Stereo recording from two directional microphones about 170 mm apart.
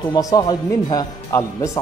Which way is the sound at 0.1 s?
20° left (ahead or behind).